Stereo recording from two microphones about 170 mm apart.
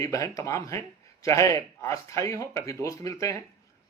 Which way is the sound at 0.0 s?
20° left (ahead or behind).